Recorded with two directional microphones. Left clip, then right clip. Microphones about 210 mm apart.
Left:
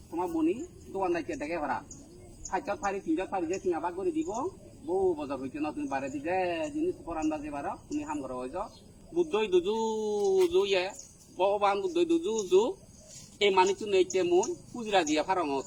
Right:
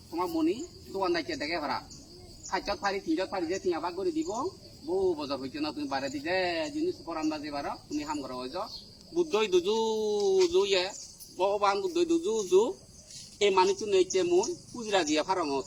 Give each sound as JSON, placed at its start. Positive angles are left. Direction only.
{"t": 0.2, "sound": "speech", "side_deg": 15}